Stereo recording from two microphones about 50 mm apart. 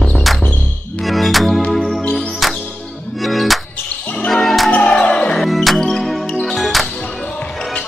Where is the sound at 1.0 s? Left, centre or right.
Centre.